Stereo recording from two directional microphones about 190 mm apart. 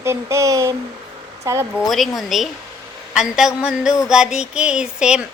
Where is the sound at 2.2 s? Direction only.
Centre (ahead or behind).